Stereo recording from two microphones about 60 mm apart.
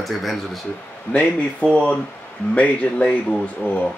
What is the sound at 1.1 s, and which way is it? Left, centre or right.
Speech, left.